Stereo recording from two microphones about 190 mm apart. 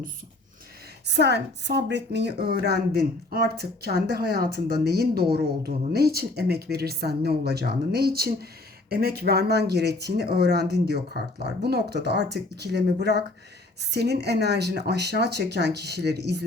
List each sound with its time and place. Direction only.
1.0 s speech: 60° right (ahead or behind)